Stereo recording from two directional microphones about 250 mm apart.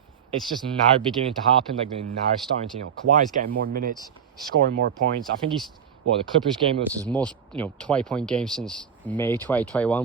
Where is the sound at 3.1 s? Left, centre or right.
Right.